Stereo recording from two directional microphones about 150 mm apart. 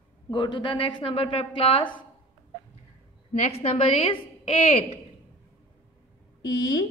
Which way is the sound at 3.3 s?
45° left (ahead or behind).